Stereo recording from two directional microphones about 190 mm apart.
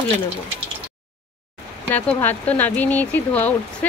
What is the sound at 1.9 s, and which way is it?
Speech, 10° left (ahead or behind).